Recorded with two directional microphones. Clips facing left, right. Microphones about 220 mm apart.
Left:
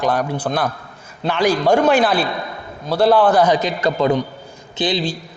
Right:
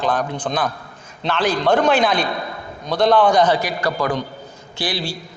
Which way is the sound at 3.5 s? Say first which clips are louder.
Left 3 dB; 20° left (ahead or behind).